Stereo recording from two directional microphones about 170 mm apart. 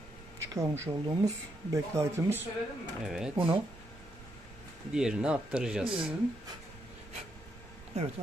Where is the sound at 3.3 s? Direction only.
30° right (ahead or behind).